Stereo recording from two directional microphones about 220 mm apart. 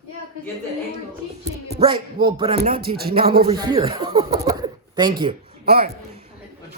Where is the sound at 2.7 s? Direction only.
45° right (ahead or behind).